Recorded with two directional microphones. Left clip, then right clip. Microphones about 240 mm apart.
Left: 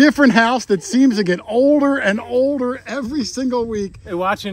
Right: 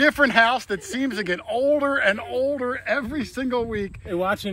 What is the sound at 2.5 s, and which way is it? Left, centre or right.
Speech, left.